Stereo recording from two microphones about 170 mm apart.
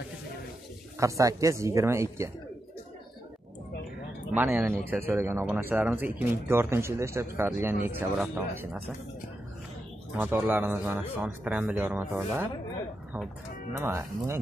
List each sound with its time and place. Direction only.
0.9 s speech: 20° right (ahead or behind)
4.4 s speech: 10° right (ahead or behind)
10.1 s speech: 10° right (ahead or behind)
13.7 s speech: 15° right (ahead or behind)